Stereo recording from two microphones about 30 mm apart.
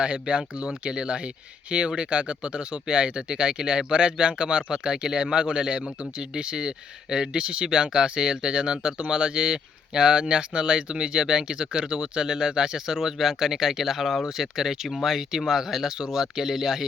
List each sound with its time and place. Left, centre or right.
0.0 s speech: right; by 16.8 s centre